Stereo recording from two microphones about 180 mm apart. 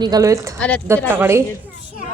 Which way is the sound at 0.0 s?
20° right (ahead or behind).